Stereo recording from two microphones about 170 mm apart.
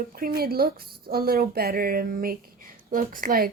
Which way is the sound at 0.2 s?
65° right (ahead or behind).